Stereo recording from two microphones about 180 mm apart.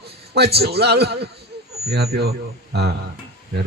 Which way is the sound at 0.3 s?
60° right (ahead or behind).